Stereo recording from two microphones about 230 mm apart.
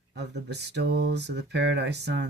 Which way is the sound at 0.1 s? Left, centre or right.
Right.